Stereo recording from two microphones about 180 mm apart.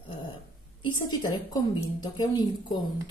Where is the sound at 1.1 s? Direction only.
20° left (ahead or behind).